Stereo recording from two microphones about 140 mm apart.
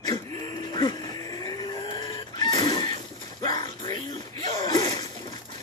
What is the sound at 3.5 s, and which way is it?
Music, 30° left (ahead or behind).